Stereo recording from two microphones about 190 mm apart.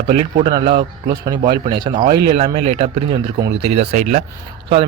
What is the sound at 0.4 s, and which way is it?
A man's voice, 25° right (ahead or behind).